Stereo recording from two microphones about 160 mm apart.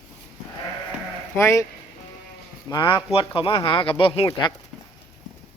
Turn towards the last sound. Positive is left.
turn(degrees=30)  # may be behind; listen again after turning